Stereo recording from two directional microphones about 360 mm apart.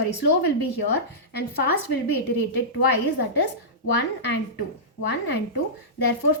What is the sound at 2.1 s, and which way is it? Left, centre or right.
A woman's voice, left.